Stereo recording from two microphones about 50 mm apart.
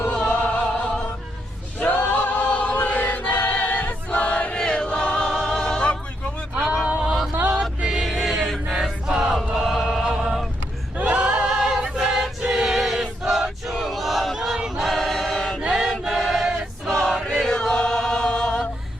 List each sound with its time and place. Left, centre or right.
0.0 s music: left
1.8 s choir: left
4.5 s choir: centre
5.3 s music: centre
6.8 s a sound: right
7.9 s a sound: centre
8.6 s chant: centre
9.6 s choir: centre
10.1 s vehicle: centre
10.9 s a sound: right
11.4 s choir: centre
15.7 s choir: centre
17.2 s chant: centre